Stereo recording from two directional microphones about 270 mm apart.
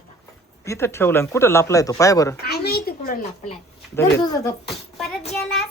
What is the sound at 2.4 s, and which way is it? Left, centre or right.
A child's voice, left.